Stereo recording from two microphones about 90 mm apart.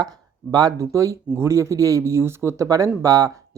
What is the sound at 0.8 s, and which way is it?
Speech, 35° right (ahead or behind).